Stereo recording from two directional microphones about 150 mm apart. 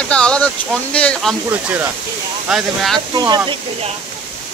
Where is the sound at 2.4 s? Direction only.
Centre (ahead or behind).